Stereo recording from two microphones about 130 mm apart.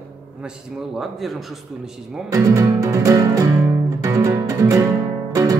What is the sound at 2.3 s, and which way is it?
Music, 25° right (ahead or behind).